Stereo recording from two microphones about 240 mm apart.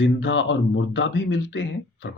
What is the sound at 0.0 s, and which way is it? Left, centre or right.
Speech, left.